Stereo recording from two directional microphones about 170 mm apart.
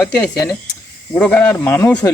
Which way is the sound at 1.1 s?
10° left (ahead or behind).